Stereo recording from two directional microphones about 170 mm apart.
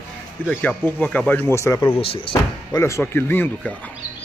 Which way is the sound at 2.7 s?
15° left (ahead or behind).